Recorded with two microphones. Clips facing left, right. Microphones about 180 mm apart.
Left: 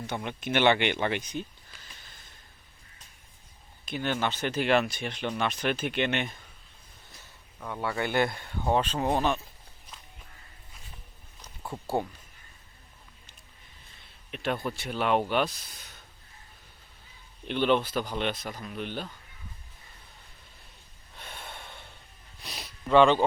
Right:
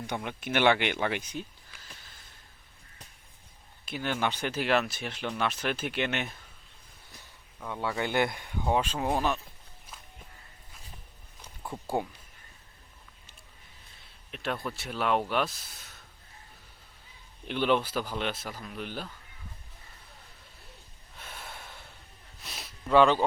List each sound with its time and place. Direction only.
0.3 s speech: 10° right (ahead or behind)
3.8 s speech: 5° right (ahead or behind)
7.9 s speech: 15° right (ahead or behind)
14.3 s speech: centre (ahead or behind)
17.5 s speech: 5° right (ahead or behind)
21.2 s gasp: 5° right (ahead or behind)
22.4 s a sound: centre (ahead or behind)